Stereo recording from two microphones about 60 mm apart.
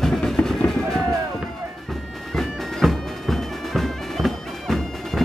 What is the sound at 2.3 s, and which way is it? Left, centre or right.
Bagpipes, centre.